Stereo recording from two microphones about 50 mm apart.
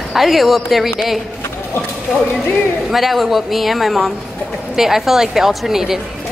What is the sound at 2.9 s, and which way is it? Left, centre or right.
Speech, centre.